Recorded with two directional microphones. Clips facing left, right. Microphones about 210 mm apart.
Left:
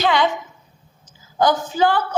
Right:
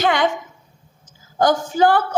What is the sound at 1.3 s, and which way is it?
Speech, 45° right (ahead or behind).